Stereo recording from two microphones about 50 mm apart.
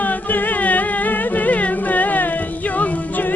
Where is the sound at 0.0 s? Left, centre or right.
Left.